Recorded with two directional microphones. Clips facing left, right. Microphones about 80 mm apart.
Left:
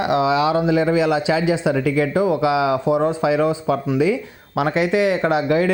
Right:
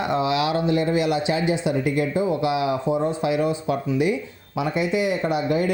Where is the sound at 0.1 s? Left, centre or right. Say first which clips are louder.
Left 5 dB; left.